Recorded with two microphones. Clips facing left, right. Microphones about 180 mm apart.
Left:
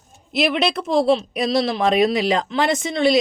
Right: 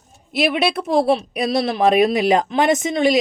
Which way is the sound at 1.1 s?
15° right (ahead or behind).